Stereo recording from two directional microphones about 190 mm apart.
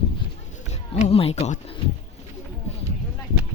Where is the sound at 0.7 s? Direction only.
35° left (ahead or behind).